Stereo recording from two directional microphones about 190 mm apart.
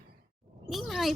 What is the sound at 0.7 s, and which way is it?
Speech, centre (ahead or behind).